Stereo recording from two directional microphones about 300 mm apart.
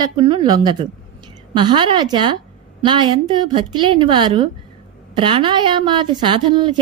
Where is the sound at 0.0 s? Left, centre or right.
Centre.